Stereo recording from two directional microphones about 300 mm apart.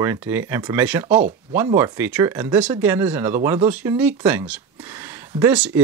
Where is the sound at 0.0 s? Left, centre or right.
Centre.